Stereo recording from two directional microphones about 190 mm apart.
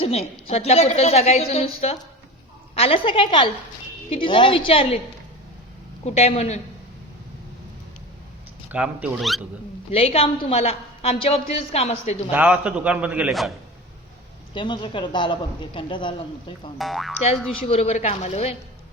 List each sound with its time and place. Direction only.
0.0 s a woman's voice: 30° left (ahead or behind)
6.1 s a woman's voice: 35° left (ahead or behind)
8.7 s a man's voice: 5° right (ahead or behind)
9.9 s a woman's voice: 30° left (ahead or behind)
12.3 s a man's voice: 10° right (ahead or behind)
14.5 s a man's voice: 25° left (ahead or behind)
16.7 s speech: centre (ahead or behind)
17.7 s a woman's voice: 35° left (ahead or behind)